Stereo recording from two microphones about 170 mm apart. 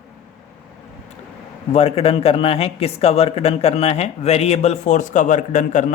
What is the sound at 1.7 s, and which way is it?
Speech, 35° left (ahead or behind).